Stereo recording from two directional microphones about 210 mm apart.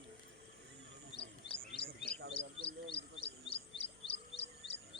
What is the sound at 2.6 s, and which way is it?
Bird, 25° left (ahead or behind).